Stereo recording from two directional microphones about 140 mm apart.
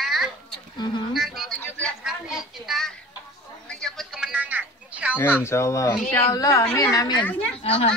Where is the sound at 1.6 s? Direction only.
10° left (ahead or behind).